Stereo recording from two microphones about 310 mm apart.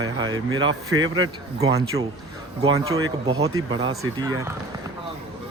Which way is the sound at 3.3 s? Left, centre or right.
Centre.